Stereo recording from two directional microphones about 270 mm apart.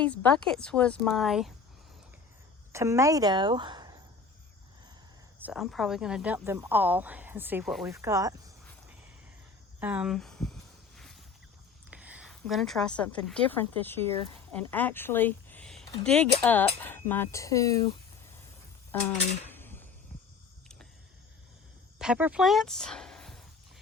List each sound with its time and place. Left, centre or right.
0.0 s speech: centre
2.7 s a woman's voice: centre
5.4 s a woman's voice: centre
9.8 s a sound: centre
11.9 s a woman's voice: centre
19.5 s a sound: centre
21.9 s speech: centre